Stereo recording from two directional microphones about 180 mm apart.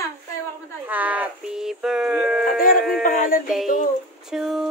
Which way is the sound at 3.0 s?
50° left (ahead or behind).